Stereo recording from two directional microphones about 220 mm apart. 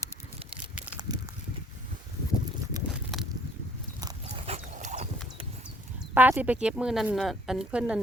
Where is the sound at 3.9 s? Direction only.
20° right (ahead or behind).